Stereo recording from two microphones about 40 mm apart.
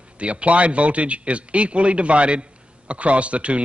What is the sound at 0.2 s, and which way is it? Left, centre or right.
A man's voice, right.